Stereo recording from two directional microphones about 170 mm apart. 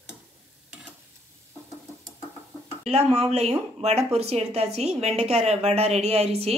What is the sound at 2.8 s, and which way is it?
A woman's voice, 40° right (ahead or behind).